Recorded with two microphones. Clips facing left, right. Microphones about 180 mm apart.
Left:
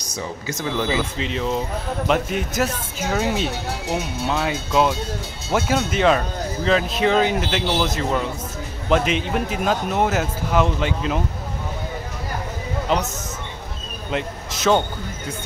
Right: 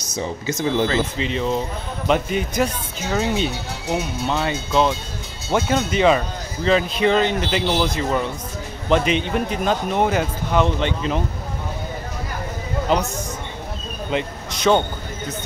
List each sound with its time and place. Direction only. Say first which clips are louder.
0.1 s speech: right 4 dB; 20° right (ahead or behind)
1.1 s speech: right 2 dB; centre (ahead or behind)
12.9 s speech: right 2 dB; centre (ahead or behind)
14.1 s a sound: right 1 dB; centre (ahead or behind)